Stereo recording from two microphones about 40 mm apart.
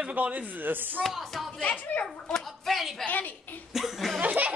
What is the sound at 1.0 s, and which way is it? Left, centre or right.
Speech, centre.